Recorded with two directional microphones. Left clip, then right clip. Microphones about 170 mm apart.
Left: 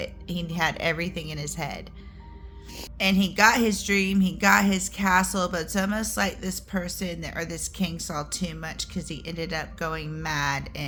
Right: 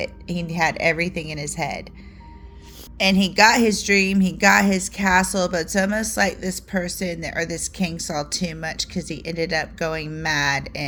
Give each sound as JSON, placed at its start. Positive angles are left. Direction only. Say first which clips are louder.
{"t": 0.0, "sound": "a woman's voice", "louder": "right 5 dB", "side_deg": -20}
{"t": 3.0, "sound": "a woman's voice", "louder": "right 5 dB", "side_deg": -25}